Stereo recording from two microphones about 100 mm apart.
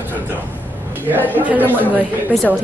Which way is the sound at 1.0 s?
20° right (ahead or behind).